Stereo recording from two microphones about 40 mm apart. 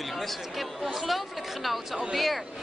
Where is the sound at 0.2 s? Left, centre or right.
Centre.